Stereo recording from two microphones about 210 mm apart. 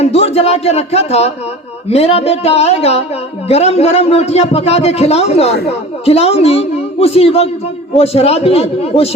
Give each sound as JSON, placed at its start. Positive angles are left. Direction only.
{"t": 0.0, "sound": "a man's voice", "side_deg": 30}